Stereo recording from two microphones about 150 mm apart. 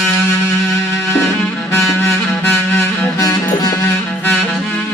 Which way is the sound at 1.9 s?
15° left (ahead or behind).